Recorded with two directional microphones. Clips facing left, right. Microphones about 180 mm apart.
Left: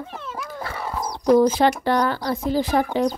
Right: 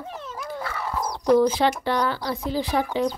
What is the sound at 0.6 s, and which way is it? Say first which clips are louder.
Wild animals: right 1 dB; 35° left (ahead or behind).